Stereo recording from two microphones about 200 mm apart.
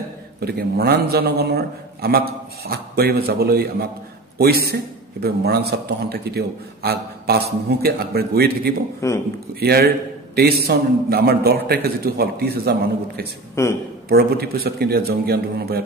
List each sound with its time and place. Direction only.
0.5 s a man's voice: 50° right (ahead or behind)
9.0 s a man's voice: 15° left (ahead or behind)
9.6 s a man's voice: 50° right (ahead or behind)
13.6 s a man's voice: 10° left (ahead or behind)
14.0 s a man's voice: 50° right (ahead or behind)